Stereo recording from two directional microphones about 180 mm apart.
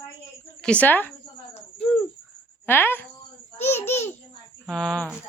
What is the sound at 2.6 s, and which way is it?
Speech, 10° left (ahead or behind).